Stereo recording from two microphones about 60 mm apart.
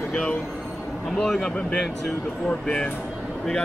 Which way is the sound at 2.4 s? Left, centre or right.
Centre.